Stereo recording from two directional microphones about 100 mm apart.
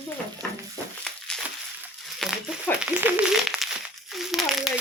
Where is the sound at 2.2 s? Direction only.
5° left (ahead or behind).